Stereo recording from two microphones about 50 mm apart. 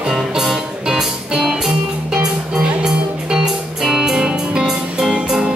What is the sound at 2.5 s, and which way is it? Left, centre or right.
Music, centre.